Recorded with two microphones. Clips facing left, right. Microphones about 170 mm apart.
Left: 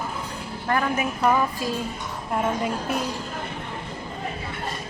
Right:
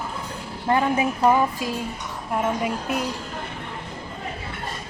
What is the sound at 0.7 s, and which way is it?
A woman's voice, 25° right (ahead or behind).